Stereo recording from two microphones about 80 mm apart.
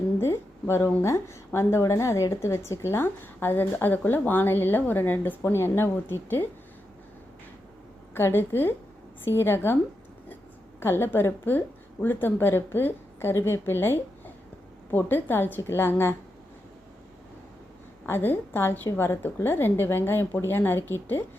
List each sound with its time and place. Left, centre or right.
0.2 s a woman's voice: left
8.1 s a woman's voice: left
10.8 s a woman's voice: left
18.0 s a woman's voice: left